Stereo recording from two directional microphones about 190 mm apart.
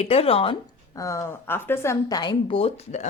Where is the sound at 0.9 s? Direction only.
15° left (ahead or behind).